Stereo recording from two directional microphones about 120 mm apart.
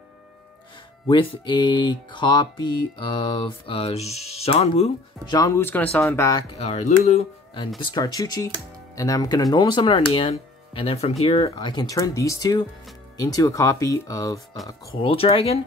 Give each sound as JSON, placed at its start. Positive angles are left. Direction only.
{"t": 1.0, "sound": "speech", "side_deg": 40}
{"t": 5.2, "sound": "speech", "side_deg": 35}
{"t": 5.5, "sound": "speech", "side_deg": 20}
{"t": 6.6, "sound": "speech", "side_deg": 70}
{"t": 7.9, "sound": "speech", "side_deg": 30}
{"t": 11.5, "sound": "speech", "side_deg": 35}
{"t": 15.0, "sound": "speech", "side_deg": 50}